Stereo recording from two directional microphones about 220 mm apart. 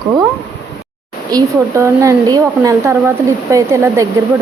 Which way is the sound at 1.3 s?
15° right (ahead or behind).